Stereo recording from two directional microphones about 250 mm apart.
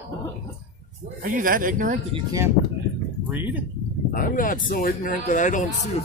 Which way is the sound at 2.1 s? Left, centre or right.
Centre.